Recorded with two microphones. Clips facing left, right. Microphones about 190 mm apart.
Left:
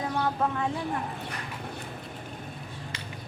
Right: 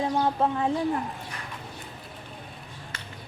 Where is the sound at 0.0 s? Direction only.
30° right (ahead or behind).